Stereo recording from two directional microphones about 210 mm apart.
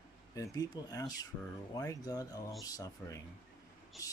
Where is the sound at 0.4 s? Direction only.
20° left (ahead or behind).